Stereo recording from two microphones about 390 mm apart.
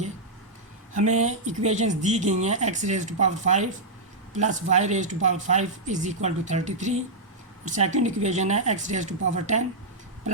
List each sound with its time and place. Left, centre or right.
0.9 s speech: centre